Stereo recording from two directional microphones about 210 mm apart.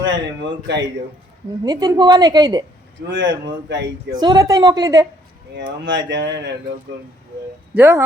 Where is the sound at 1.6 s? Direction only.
20° right (ahead or behind).